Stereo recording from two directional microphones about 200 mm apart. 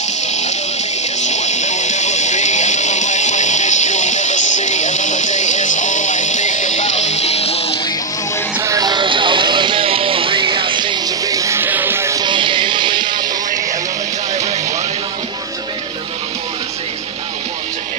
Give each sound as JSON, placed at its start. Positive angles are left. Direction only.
{"t": 1.2, "sound": "music", "side_deg": 35}
{"t": 8.5, "sound": "music", "side_deg": -15}